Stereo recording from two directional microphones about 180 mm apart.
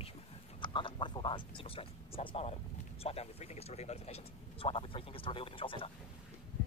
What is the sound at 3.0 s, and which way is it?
Speech, 35° left (ahead or behind).